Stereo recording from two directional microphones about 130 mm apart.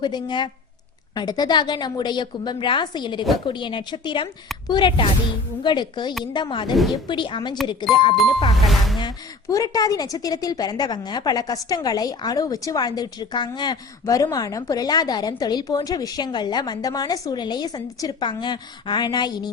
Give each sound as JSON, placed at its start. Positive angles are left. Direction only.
{"t": 0.0, "sound": "a woman's voice", "side_deg": 35}
{"t": 8.6, "sound": "music", "side_deg": 0}
{"t": 9.0, "sound": "a woman's voice", "side_deg": 30}